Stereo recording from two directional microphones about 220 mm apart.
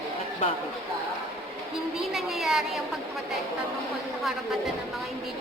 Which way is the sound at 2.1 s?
Centre (ahead or behind).